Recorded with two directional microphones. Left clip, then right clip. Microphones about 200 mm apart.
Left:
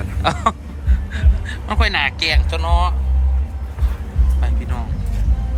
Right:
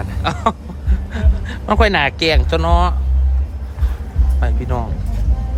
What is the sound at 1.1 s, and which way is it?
A man's voice, 45° right (ahead or behind).